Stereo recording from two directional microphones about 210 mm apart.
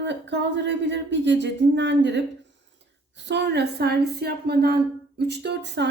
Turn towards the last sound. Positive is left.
turn(degrees=-55)  # may be behind; listen again after turning